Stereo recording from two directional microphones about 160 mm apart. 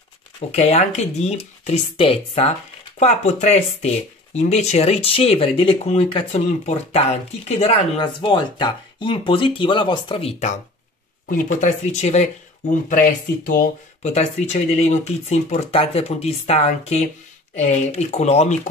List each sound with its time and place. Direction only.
0.5 s speech: 40° left (ahead or behind)
8.0 s speech: 30° left (ahead or behind)
11.2 s speech: 55° left (ahead or behind)
14.0 s speech: 45° left (ahead or behind)